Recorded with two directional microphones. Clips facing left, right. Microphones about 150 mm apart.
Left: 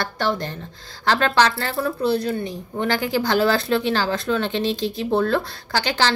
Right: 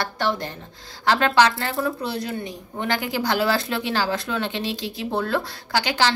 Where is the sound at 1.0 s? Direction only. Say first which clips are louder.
Even; 15° right (ahead or behind).